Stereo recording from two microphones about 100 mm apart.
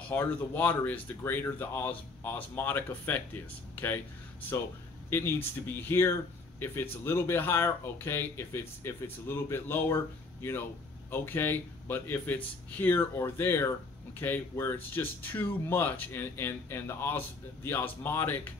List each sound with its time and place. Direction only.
0.1 s speech: 20° left (ahead or behind)
11.1 s speech: 20° left (ahead or behind)